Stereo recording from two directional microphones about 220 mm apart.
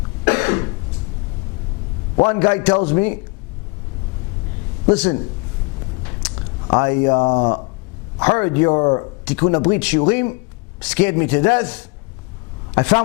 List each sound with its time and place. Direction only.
0.3 s cough: 15° left (ahead or behind)
2.1 s a man's voice: 20° left (ahead or behind)
4.9 s a man's voice: 15° left (ahead or behind)
6.7 s a man's voice: 15° left (ahead or behind)
7.2 s speech: 30° left (ahead or behind)
9.2 s a man's voice: 15° left (ahead or behind)